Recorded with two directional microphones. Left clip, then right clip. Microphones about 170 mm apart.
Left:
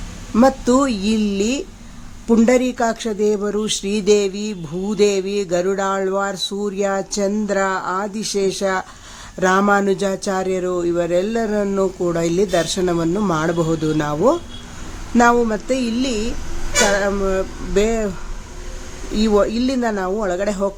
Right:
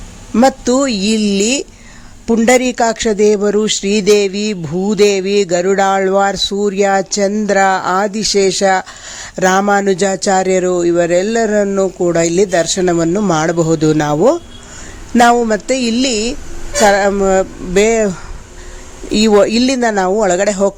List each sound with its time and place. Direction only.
0.3 s speech: 20° right (ahead or behind)
19.1 s speech: 35° right (ahead or behind)